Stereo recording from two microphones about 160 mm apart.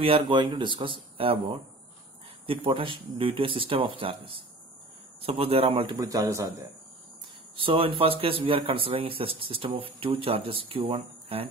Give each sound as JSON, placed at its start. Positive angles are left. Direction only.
{"t": 0.0, "sound": "speech", "side_deg": -35}
{"t": 5.9, "sound": "a man's voice", "side_deg": -20}
{"t": 7.5, "sound": "speech", "side_deg": -35}